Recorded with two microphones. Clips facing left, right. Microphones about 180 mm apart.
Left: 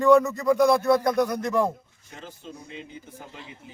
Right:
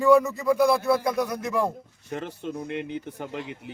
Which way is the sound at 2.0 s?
65° right (ahead or behind).